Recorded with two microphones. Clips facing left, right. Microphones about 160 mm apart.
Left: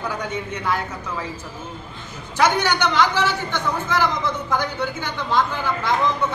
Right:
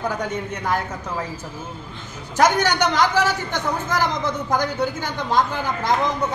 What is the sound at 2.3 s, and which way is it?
A man's voice, 45° right (ahead or behind).